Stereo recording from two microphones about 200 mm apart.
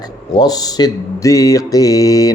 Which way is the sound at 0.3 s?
20° left (ahead or behind).